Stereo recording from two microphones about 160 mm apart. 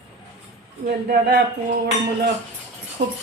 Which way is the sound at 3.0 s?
75° right (ahead or behind).